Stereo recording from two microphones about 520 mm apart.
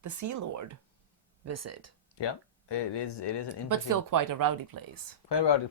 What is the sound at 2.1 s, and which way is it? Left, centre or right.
Speech, left.